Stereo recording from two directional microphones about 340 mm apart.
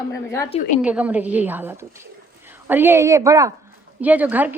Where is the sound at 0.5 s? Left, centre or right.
Left.